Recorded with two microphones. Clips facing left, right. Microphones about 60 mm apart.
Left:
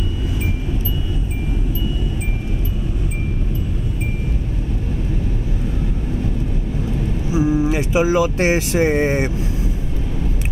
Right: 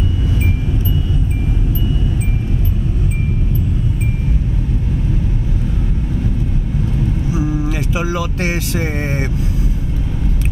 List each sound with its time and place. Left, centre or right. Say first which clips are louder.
7.2 s speech: left 6 dB; left